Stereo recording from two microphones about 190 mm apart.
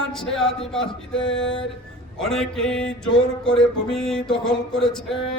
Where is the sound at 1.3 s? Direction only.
75° left (ahead or behind).